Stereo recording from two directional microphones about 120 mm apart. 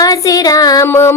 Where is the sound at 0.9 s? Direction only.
20° left (ahead or behind).